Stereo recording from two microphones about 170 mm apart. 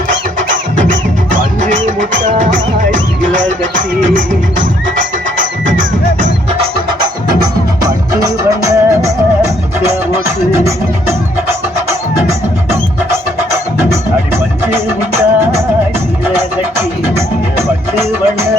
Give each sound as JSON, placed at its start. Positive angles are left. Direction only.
{"t": 0.1, "sound": "music", "side_deg": -50}
{"t": 6.6, "sound": "music", "side_deg": -25}